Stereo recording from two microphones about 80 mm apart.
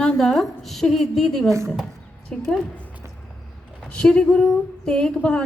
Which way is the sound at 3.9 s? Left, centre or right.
Centre.